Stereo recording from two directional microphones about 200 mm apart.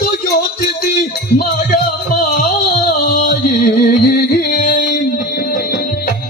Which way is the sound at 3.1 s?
50° left (ahead or behind).